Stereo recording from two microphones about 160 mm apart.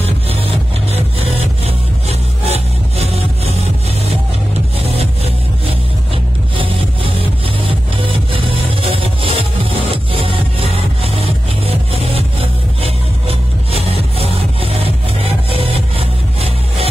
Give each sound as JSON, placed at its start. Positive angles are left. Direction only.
{"t": 1.7, "sound": "music", "side_deg": -40}
{"t": 4.7, "sound": "music", "side_deg": -40}